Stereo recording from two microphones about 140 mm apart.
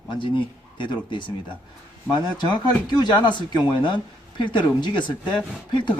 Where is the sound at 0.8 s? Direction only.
35° left (ahead or behind).